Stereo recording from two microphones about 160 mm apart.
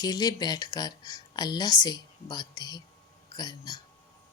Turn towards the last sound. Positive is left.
turn(degrees=25)  # may be behind; listen again after turning